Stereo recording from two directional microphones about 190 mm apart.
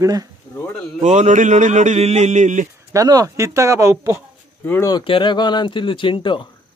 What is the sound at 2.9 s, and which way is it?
Speech, 20° right (ahead or behind).